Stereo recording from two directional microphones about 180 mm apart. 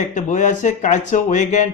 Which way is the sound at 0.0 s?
45° left (ahead or behind).